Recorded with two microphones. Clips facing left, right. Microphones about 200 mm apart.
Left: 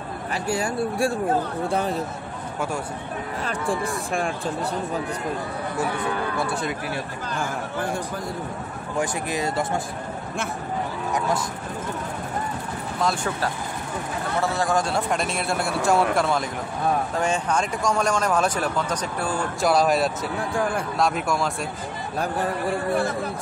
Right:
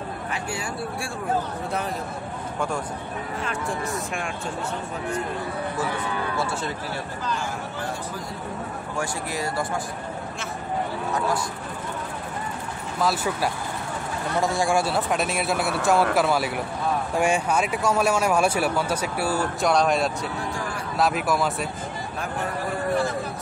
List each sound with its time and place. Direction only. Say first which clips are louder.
0.3 s speech: left 8 dB; 40° left (ahead or behind)
3.4 s speech: left 4 dB; 35° left (ahead or behind)
6.3 s speech: left 1 dB; 15° left (ahead or behind)
8.9 s speech: left 4 dB; 20° left (ahead or behind)
13.0 s speech: right 1 dB; 5° right (ahead or behind)